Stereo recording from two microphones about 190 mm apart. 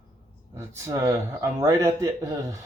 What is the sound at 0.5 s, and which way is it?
Speech, 15° right (ahead or behind).